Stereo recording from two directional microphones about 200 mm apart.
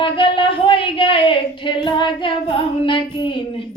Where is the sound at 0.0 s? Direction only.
25° left (ahead or behind).